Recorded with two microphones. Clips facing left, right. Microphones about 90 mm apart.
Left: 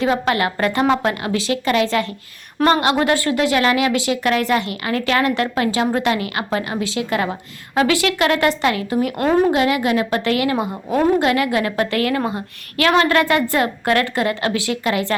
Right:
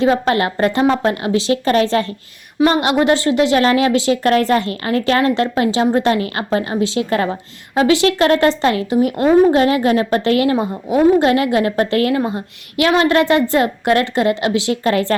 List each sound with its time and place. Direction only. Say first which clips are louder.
0.0 s a woman's voice: right 3 dB; 30° right (ahead or behind)
2.7 s a woman's voice: right 3 dB; 25° right (ahead or behind)
9.5 s a woman's voice: right 4 dB; 35° right (ahead or behind)
14.8 s a woman's voice: right 4 dB; 40° right (ahead or behind)